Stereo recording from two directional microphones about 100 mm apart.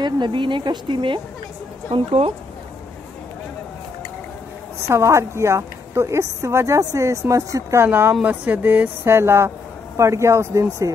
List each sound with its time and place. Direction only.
0.0 s speech: 50° right (ahead or behind)
1.9 s speech: 80° right
4.8 s a woman's voice: 30° right (ahead or behind)